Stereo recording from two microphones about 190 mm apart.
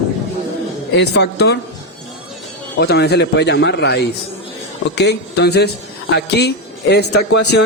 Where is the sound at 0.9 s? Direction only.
60° left (ahead or behind).